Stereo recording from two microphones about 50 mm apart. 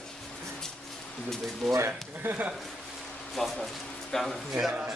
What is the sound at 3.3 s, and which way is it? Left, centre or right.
Speech, centre.